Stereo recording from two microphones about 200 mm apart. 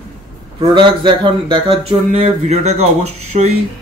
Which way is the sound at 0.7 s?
25° right (ahead or behind).